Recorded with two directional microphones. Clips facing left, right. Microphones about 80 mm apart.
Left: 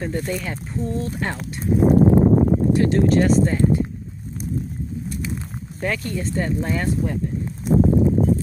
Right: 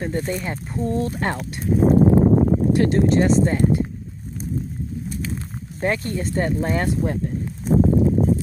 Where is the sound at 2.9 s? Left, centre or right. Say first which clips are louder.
Even; right.